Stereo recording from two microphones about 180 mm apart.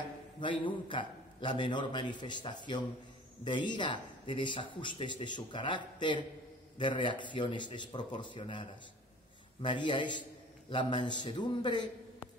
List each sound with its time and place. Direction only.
0.4 s speech: 25° left (ahead or behind)